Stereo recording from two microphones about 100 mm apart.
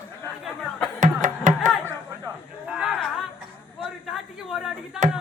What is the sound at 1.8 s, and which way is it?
Chop, 25° right (ahead or behind).